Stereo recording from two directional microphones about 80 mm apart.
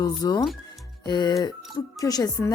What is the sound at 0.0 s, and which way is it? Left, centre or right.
Speech, left.